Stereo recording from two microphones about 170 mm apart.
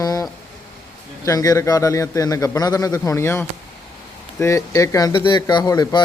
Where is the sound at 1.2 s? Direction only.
20° left (ahead or behind).